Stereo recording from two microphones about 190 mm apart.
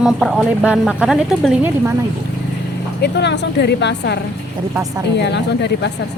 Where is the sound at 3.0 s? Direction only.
60° left (ahead or behind).